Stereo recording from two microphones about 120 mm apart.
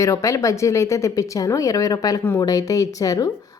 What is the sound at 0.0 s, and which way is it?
Speech, 25° left (ahead or behind).